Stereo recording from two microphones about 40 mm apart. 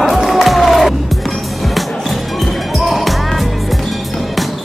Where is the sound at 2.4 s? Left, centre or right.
Centre.